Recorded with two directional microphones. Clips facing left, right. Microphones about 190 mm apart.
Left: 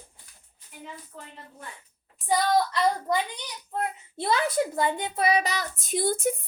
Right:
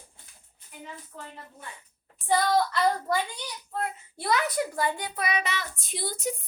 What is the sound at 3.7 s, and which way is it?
A child's voice, 20° left (ahead or behind).